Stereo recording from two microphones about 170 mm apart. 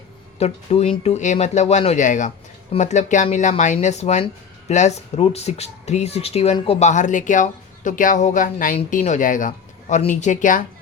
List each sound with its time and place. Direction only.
0.3 s speech: 40° left (ahead or behind)